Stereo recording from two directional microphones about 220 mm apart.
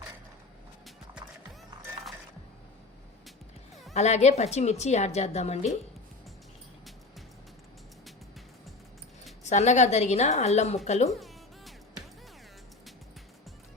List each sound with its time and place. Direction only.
3.9 s a woman's voice: 30° left (ahead or behind)
9.4 s a woman's voice: 30° left (ahead or behind)
11.1 s music: centre (ahead or behind)